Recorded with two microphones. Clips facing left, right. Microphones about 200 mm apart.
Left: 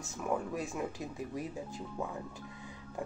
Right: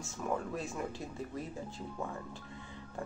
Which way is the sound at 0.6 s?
15° left (ahead or behind).